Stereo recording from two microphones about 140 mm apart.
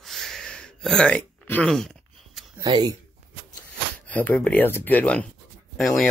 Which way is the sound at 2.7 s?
35° right (ahead or behind).